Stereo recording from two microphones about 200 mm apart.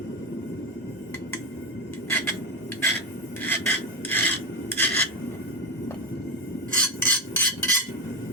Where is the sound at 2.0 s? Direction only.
10° left (ahead or behind).